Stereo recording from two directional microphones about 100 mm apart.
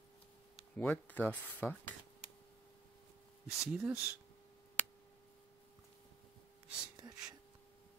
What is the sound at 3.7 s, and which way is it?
Speech, 20° right (ahead or behind).